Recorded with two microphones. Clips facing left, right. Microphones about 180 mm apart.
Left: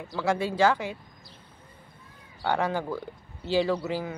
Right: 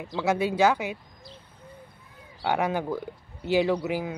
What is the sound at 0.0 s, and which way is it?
Speech, 15° right (ahead or behind).